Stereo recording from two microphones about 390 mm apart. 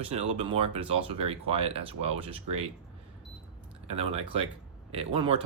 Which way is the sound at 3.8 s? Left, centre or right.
Centre.